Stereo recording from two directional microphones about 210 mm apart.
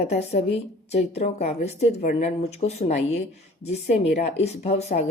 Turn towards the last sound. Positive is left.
turn(degrees=30)  # may be behind; listen again after turning